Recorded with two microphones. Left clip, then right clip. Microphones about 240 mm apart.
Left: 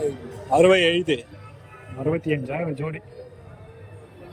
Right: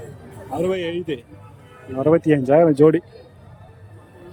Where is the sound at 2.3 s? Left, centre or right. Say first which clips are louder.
Right 12 dB; right.